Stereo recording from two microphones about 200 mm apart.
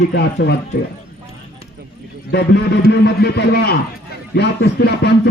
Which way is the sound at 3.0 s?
55° left (ahead or behind).